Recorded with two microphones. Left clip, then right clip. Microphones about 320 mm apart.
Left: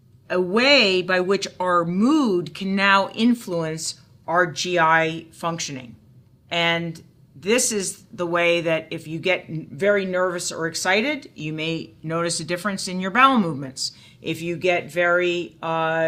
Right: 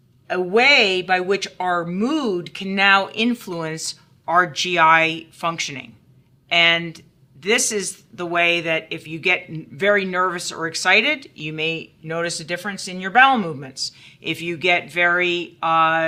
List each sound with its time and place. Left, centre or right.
0.3 s speech: right